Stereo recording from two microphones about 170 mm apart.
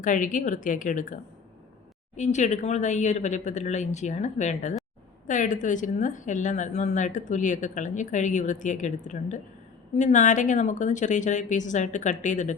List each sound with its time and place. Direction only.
0.0 s a woman's voice: 50° left (ahead or behind)